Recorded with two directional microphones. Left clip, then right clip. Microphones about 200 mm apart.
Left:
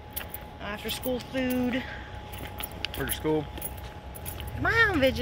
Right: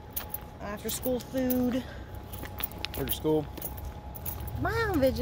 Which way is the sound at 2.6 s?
10° right (ahead or behind).